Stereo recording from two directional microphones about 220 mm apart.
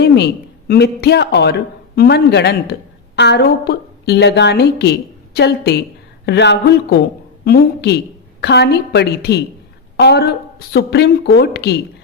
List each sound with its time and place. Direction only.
0.7 s a woman's voice: 50° left (ahead or behind)